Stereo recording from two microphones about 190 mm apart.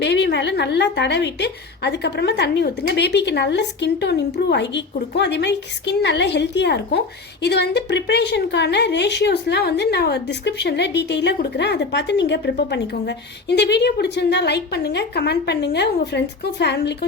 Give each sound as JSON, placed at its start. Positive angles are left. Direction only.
{"t": 0.0, "sound": "a woman's voice", "side_deg": 65}